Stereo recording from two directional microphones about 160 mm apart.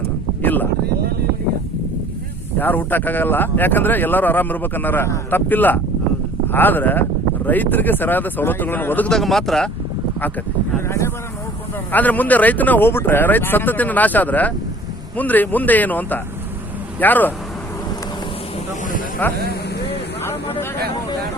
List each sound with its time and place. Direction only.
0.4 s a sound: 10° left (ahead or behind)
2.6 s speech: 10° left (ahead or behind)
10.8 s speech: 15° left (ahead or behind)
19.2 s speech: 10° left (ahead or behind)